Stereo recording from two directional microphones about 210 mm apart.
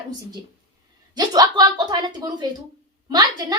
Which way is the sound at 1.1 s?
20° right (ahead or behind).